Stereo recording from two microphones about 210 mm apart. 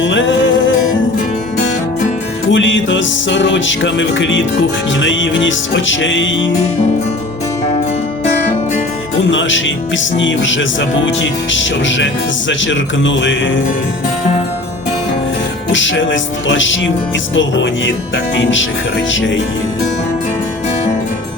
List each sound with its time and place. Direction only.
0.0 s music: 65° left (ahead or behind)
2.5 s music: 65° left (ahead or behind)
4.9 s speech: 65° left (ahead or behind)
9.3 s speech: 65° left (ahead or behind)
15.7 s speech: 60° left (ahead or behind)
19.1 s speech: 65° left (ahead or behind)